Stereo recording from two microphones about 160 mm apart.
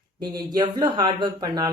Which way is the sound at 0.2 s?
25° right (ahead or behind).